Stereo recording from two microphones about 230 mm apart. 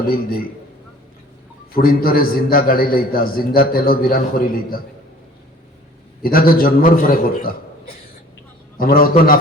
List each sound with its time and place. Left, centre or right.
1.7 s a man's voice: left
6.2 s a man's voice: left
8.8 s a man's voice: left